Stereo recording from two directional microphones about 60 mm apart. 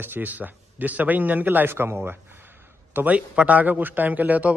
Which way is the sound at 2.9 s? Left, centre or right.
Right.